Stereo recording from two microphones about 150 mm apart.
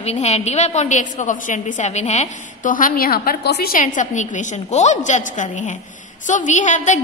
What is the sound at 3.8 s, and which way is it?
A woman's voice, 55° left (ahead or behind).